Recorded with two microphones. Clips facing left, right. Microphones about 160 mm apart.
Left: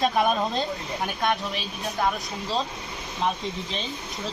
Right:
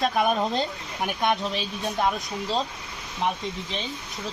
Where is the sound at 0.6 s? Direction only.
20° right (ahead or behind).